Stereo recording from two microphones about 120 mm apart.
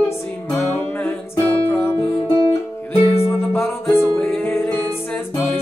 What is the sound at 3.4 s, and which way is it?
Music, 20° left (ahead or behind).